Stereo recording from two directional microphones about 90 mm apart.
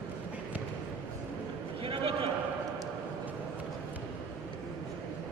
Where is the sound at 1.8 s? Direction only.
90° right.